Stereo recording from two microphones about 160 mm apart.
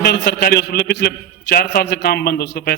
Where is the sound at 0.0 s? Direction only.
85° left.